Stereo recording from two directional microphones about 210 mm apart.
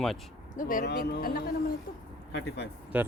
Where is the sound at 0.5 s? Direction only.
40° left (ahead or behind).